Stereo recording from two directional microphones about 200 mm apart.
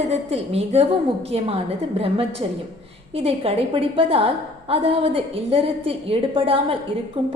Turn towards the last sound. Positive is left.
turn(degrees=-25)  # may be behind; listen again after turning